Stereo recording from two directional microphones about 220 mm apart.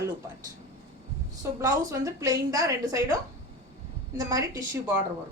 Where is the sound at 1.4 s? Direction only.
10° right (ahead or behind).